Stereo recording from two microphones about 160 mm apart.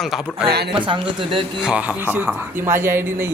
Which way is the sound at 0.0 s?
Centre (ahead or behind).